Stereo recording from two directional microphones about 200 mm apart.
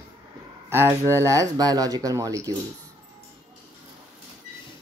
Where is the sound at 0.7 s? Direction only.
15° right (ahead or behind).